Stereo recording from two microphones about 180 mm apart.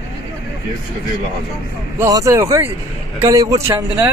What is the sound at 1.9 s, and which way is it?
Speech, 15° right (ahead or behind).